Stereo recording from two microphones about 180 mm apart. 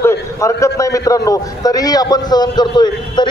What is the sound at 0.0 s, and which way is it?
A man's voice, 15° left (ahead or behind).